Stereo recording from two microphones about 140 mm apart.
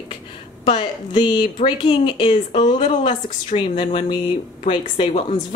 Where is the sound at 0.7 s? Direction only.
35° left (ahead or behind).